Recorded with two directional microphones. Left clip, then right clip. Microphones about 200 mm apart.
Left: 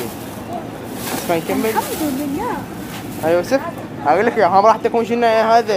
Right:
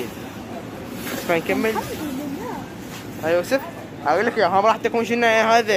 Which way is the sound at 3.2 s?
10° left (ahead or behind).